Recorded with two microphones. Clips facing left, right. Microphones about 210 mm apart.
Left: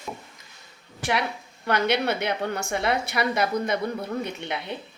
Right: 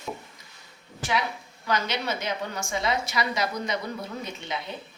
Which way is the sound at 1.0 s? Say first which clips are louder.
Left 2 dB; 60° left (ahead or behind).